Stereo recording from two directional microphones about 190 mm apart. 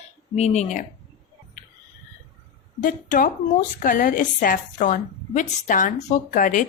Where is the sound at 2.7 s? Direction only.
45° left (ahead or behind).